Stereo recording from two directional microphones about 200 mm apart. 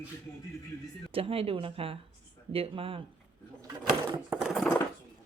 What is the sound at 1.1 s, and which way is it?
Speech, 30° right (ahead or behind).